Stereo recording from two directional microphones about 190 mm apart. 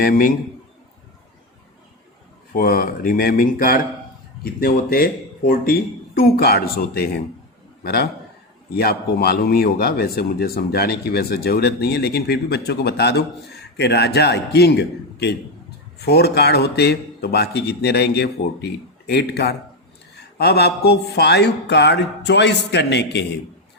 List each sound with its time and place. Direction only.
0.0 s speech: 45° left (ahead or behind)
2.5 s speech: 50° left (ahead or behind)
8.7 s speech: 55° left (ahead or behind)